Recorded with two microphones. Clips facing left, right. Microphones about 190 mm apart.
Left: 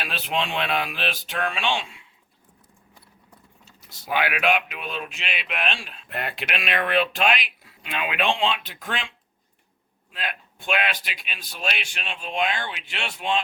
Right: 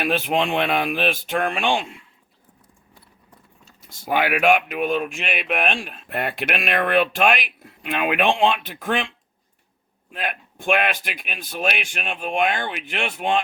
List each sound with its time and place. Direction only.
0.0 s speech: 55° right (ahead or behind)
3.8 s speech: 50° right (ahead or behind)
10.1 s speech: 50° right (ahead or behind)